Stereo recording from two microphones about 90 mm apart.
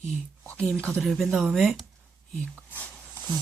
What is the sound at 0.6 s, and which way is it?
Speech, 10° left (ahead or behind).